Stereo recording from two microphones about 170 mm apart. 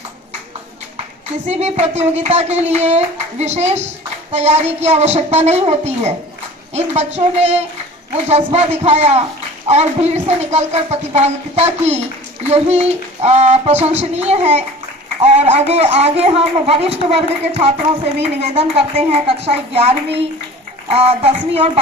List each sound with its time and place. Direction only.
1.5 s speech: 40° right (ahead or behind)